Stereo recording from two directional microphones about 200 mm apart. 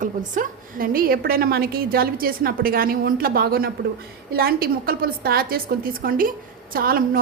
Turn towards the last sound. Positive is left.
turn(degrees=-45)  # may be behind; listen again after turning